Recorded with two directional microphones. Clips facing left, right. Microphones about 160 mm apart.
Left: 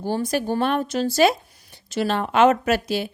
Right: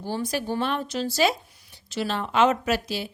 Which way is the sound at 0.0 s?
50° left (ahead or behind).